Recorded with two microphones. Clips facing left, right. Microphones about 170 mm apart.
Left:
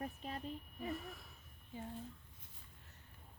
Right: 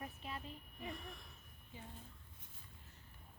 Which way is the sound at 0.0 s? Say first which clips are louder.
Left 3 dB; 40° left (ahead or behind).